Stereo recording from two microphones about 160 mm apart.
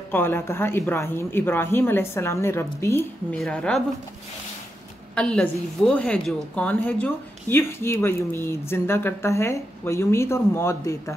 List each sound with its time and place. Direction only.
0.1 s a woman's voice: 15° left (ahead or behind)
5.1 s a woman's voice: 5° left (ahead or behind)